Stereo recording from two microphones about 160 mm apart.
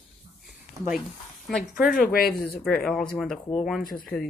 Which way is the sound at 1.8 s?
60° left (ahead or behind).